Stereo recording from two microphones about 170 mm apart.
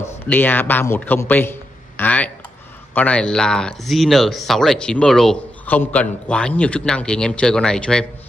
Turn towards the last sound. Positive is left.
turn(degrees=5)  # may be behind; listen again after turning